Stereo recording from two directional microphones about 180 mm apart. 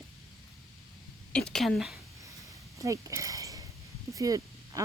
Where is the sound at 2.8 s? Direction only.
15° right (ahead or behind).